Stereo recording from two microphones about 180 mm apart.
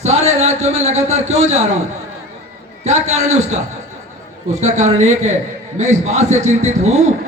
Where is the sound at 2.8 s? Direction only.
40° right (ahead or behind).